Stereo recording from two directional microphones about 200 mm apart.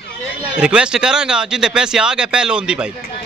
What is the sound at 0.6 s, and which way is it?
A man's voice, 5° right (ahead or behind).